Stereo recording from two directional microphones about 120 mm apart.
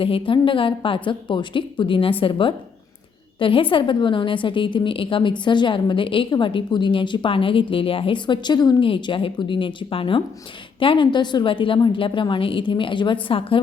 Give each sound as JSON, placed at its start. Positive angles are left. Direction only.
{"t": 0.0, "sound": "a woman's voice", "side_deg": 45}